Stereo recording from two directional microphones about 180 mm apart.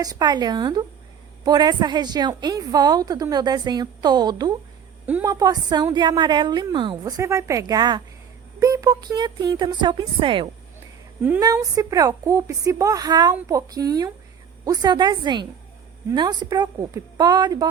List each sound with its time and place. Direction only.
0.0 s a woman's voice: 20° right (ahead or behind)
11.2 s a woman's voice: 10° right (ahead or behind)